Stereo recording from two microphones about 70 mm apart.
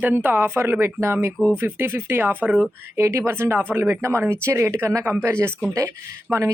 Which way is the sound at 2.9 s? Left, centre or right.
Right.